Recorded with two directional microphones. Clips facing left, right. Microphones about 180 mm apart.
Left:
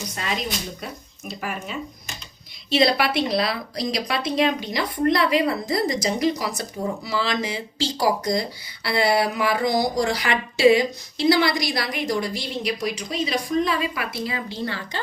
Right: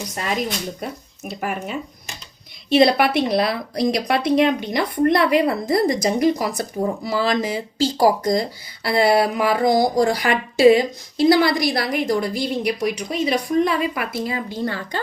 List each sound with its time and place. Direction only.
0.2 s speech: 45° right (ahead or behind)
1.3 s speech: 55° right (ahead or behind)